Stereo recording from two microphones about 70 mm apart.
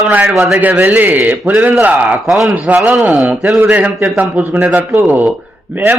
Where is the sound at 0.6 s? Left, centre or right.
Right.